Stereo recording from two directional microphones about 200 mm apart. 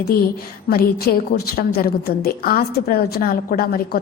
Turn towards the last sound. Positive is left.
turn(degrees=45)  # may be behind; listen again after turning